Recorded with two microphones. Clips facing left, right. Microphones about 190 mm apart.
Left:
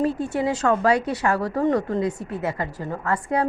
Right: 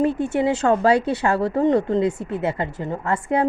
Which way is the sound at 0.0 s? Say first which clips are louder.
Right 3 dB; 25° right (ahead or behind).